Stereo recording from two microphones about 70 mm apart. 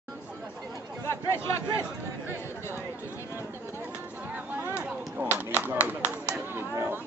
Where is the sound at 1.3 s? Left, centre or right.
Left.